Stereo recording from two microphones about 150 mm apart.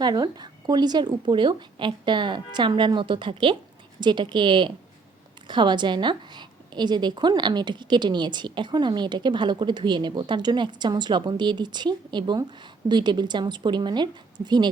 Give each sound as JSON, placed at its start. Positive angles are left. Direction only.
{"t": 0.0, "sound": "a woman's voice", "side_deg": -30}